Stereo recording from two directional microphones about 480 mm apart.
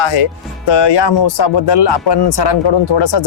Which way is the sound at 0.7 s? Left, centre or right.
Left.